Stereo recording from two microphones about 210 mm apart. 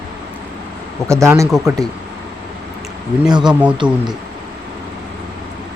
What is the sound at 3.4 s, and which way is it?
Speech, 5° right (ahead or behind).